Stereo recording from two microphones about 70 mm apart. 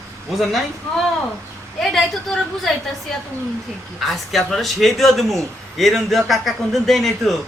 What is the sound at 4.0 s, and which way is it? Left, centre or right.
A man's voice, centre.